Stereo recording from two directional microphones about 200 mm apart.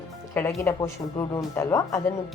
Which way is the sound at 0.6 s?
15° left (ahead or behind).